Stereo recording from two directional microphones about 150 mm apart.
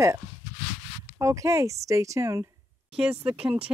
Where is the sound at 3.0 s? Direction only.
5° right (ahead or behind).